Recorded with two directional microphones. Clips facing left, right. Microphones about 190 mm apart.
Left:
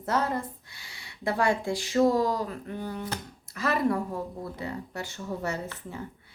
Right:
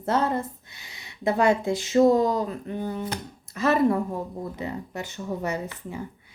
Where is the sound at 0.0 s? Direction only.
25° right (ahead or behind).